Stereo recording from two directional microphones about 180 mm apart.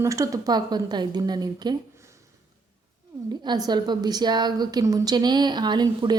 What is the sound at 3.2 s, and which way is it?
A woman's voice, 25° right (ahead or behind).